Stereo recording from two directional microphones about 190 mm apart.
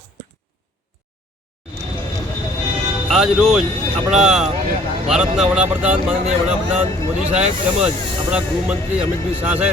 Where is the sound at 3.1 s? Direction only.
5° right (ahead or behind).